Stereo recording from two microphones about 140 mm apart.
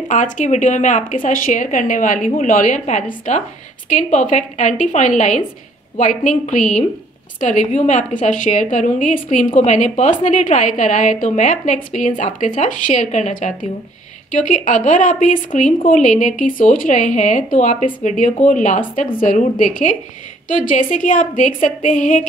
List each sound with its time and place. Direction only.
0.1 s speech: 60° left (ahead or behind)